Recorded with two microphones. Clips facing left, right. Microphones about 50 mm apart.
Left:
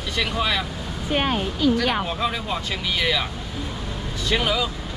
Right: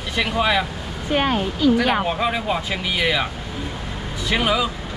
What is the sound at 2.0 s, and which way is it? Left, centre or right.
Speech, centre.